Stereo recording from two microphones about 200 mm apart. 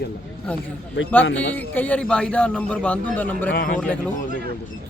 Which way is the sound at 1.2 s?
70° left (ahead or behind).